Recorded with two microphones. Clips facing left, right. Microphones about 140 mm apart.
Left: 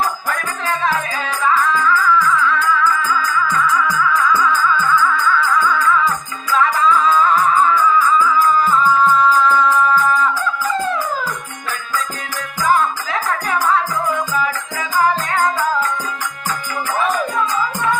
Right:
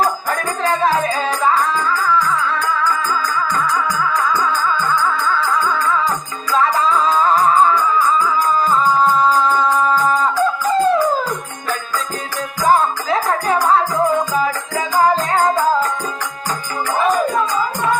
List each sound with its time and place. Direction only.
0.0 s music: 40° right (ahead or behind)
12.6 s music: 35° right (ahead or behind)